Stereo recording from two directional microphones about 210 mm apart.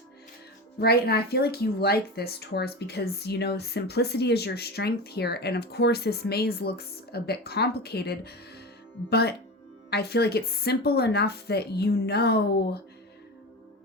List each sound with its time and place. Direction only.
0.8 s speech: 50° left (ahead or behind)